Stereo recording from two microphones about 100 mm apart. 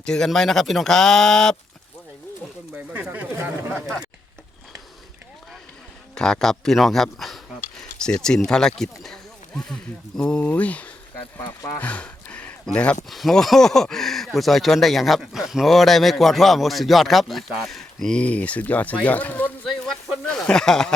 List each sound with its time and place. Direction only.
0.0 s a man's voice: 5° left (ahead or behind)
2.7 s speech: 15° right (ahead or behind)
6.1 s a man's voice: 5° left (ahead or behind)
10.2 s speech: 10° left (ahead or behind)
11.8 s a sound: 15° left (ahead or behind)
13.1 s a man's voice: centre (ahead or behind)